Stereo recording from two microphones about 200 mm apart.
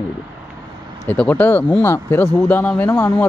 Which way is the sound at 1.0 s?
5° left (ahead or behind).